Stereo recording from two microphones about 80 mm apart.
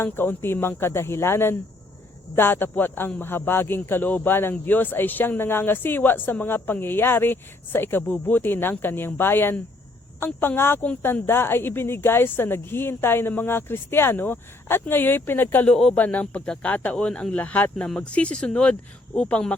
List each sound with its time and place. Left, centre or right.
0.0 s a woman's voice: left
15.7 s speech: centre
16.0 s a woman's voice: centre